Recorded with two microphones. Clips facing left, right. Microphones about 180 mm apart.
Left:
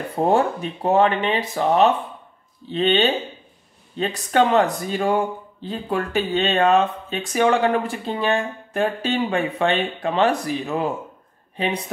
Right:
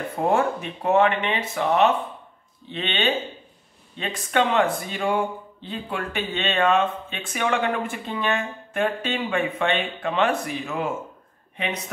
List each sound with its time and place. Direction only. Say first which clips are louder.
0.1 s speech: left 3 dB; 35° left (ahead or behind)